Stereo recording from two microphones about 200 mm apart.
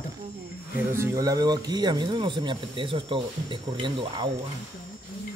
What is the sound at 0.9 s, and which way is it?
Speech, 15° right (ahead or behind).